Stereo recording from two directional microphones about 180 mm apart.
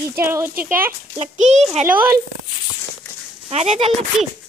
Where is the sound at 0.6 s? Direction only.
50° right (ahead or behind).